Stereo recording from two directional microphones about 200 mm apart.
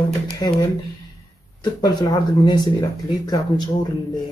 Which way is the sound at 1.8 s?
20° left (ahead or behind).